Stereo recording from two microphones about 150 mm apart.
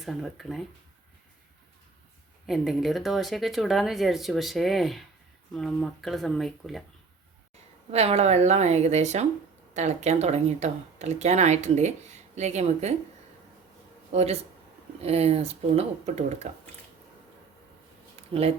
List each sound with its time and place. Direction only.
0.0 s speech: centre (ahead or behind)
2.5 s speech: centre (ahead or behind)
7.9 s speech: 45° right (ahead or behind)
14.1 s speech: 45° right (ahead or behind)
18.2 s a sound: 40° right (ahead or behind)